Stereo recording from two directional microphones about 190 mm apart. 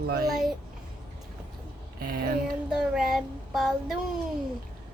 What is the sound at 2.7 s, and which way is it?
A child's voice, 5° right (ahead or behind).